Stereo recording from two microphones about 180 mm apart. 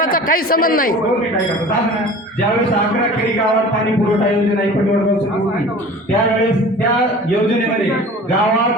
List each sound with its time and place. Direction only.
0.0 s a man's voice: 50° left (ahead or behind)